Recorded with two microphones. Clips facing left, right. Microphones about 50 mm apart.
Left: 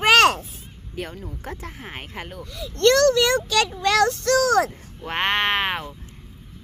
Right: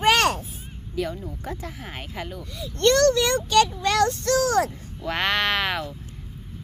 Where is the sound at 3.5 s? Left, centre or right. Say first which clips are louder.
Right 1 dB; left.